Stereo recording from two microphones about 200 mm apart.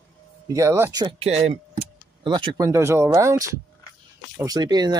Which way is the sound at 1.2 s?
30° right (ahead or behind).